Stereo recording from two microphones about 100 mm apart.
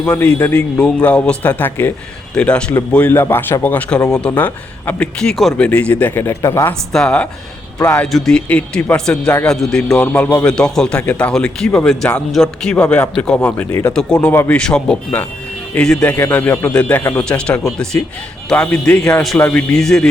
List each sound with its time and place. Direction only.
0.0 s a man's voice: 20° left (ahead or behind)
6.4 s speech: 35° left (ahead or behind)
6.9 s a man's voice: 10° left (ahead or behind)
14.6 s a man's voice: 10° left (ahead or behind)
18.5 s a man's voice: 15° left (ahead or behind)